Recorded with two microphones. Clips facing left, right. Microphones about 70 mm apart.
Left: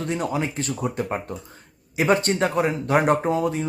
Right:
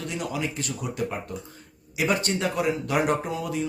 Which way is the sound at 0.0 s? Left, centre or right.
Left.